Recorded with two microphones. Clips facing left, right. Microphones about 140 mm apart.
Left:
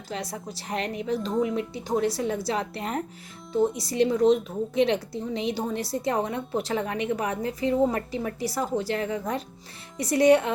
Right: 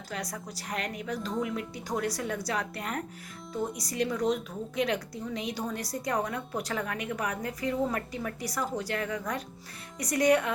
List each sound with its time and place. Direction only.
0.1 s speech: 25° left (ahead or behind)